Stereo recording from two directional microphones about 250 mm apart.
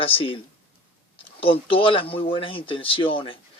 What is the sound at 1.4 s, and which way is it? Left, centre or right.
Speech, left.